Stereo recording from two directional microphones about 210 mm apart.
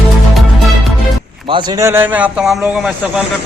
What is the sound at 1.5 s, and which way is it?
A man's voice, 20° right (ahead or behind).